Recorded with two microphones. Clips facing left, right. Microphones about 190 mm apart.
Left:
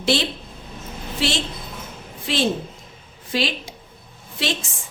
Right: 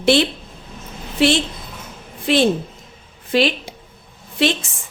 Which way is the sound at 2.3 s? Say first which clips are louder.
Right 6 dB; 55° right (ahead or behind).